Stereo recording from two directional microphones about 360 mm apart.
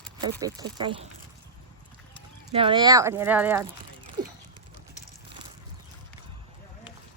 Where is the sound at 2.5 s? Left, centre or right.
Centre.